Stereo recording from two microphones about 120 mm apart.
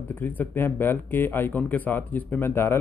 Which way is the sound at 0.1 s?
15° left (ahead or behind).